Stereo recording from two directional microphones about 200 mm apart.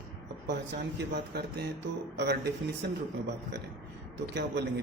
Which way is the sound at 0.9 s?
55° right (ahead or behind).